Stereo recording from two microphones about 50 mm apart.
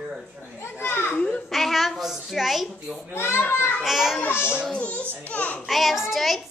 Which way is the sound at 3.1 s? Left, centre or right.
Left.